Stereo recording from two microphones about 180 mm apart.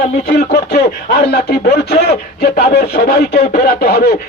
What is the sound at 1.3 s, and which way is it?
Speech, 65° left (ahead or behind).